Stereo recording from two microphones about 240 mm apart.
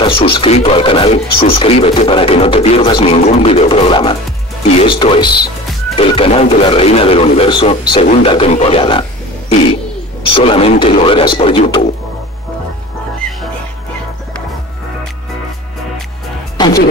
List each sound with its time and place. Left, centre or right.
0.0 s speech: left